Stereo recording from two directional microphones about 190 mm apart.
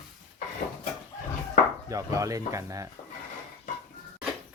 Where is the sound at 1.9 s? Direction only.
15° right (ahead or behind).